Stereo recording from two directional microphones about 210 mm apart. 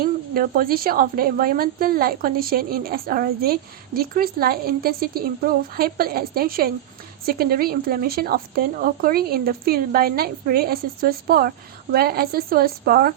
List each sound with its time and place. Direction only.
0.0 s speech: 45° right (ahead or behind)